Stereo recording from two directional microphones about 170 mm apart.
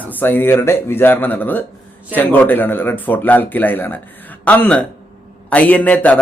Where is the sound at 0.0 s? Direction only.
10° left (ahead or behind).